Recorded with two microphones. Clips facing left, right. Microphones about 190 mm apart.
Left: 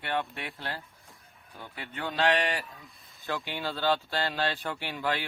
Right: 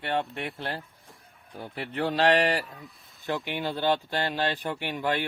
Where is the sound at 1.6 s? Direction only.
30° right (ahead or behind).